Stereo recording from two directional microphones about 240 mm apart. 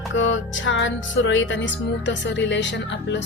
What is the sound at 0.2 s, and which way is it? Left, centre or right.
Speech, left.